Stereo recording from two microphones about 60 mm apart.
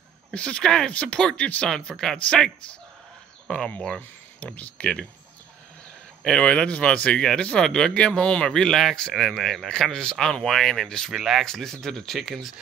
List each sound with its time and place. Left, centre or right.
0.3 s speech: centre
4.4 s speech: left
6.2 s speech: centre
11.1 s speech: centre
11.4 s speech: centre